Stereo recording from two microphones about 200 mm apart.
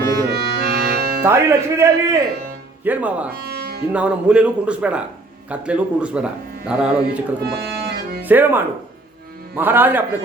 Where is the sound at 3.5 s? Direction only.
50° right (ahead or behind).